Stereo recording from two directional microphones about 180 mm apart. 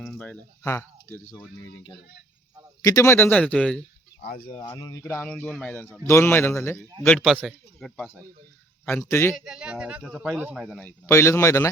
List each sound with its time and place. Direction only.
0.0 s speech: 5° left (ahead or behind)
2.8 s a man's voice: 15° left (ahead or behind)
4.2 s speech: 60° left (ahead or behind)
4.6 s a man's voice: 20° left (ahead or behind)
9.3 s a man's voice: 5° right (ahead or behind); by 11.7 s 15° left (ahead or behind)